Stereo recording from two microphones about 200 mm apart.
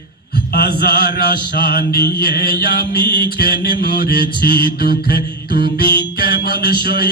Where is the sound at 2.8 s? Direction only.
25° right (ahead or behind).